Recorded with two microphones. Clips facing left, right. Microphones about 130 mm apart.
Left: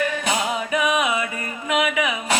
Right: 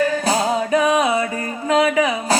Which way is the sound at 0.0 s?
35° right (ahead or behind).